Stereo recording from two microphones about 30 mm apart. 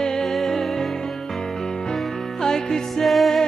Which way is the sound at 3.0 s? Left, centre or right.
Centre.